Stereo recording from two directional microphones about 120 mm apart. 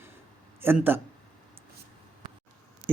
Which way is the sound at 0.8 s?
15° right (ahead or behind).